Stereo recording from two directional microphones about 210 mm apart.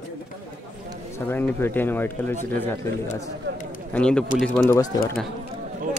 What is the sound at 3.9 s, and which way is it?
Speech, 5° left (ahead or behind).